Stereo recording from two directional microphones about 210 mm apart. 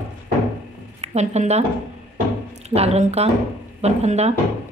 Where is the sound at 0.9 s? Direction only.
30° right (ahead or behind).